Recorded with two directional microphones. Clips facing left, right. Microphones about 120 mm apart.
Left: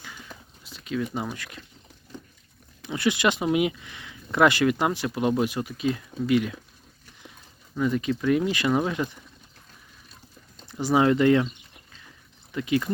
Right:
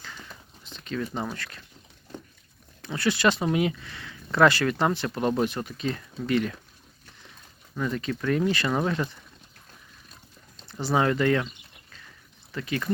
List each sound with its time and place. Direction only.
0.6 s speech: 5° left (ahead or behind)
2.8 s speech: 15° left (ahead or behind)
7.8 s speech: 10° left (ahead or behind)
10.6 s speech: 15° left (ahead or behind)
12.5 s speech: 15° left (ahead or behind)